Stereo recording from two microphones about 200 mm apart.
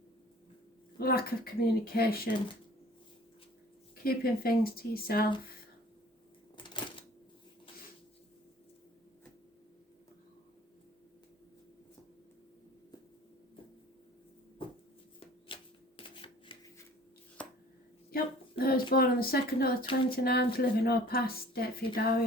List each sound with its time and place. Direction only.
0.9 s speech: 50° left (ahead or behind)
4.0 s speech: 50° left (ahead or behind)
15.5 s shuffling cards: 25° left (ahead or behind)
17.4 s chopping: 5° left (ahead or behind)
18.1 s a sound: 50° left (ahead or behind)
18.9 s speech: 50° left (ahead or behind)